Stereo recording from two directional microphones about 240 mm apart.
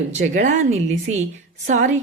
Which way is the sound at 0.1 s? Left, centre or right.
Right.